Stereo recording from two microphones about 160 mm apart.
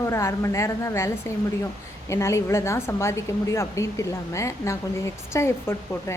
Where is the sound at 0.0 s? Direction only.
20° left (ahead or behind).